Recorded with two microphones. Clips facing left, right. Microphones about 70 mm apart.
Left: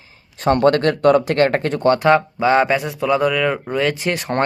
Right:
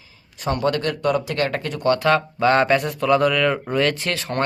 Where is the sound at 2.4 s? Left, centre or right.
Centre.